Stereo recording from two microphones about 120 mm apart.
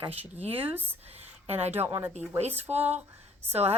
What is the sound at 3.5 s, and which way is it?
Speech, 60° right (ahead or behind).